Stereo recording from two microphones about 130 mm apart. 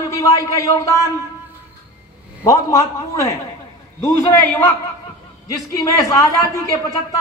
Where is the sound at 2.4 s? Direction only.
25° left (ahead or behind).